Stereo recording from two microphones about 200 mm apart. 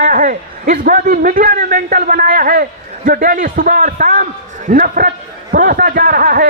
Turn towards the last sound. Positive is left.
turn(degrees=-45)  # may be behind; listen again after turning